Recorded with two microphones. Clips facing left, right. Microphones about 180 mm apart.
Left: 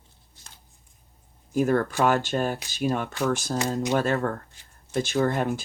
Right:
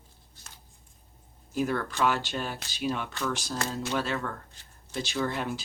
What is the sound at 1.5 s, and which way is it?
Speech, 45° left (ahead or behind).